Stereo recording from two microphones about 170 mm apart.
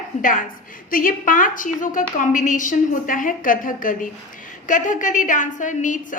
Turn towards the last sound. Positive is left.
turn(degrees=50)  # may be behind; listen again after turning